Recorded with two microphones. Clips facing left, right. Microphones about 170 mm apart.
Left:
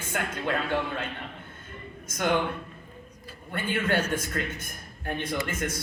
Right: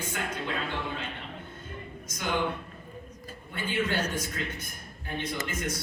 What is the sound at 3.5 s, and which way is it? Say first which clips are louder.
A man's voice: left 3 dB; 55° left (ahead or behind).